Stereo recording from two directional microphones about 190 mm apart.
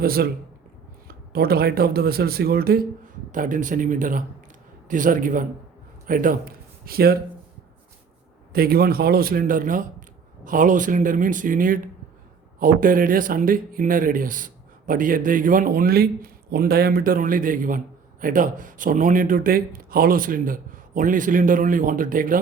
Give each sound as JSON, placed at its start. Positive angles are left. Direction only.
{"t": 0.0, "sound": "speech", "side_deg": -50}
{"t": 8.5, "sound": "speech", "side_deg": -50}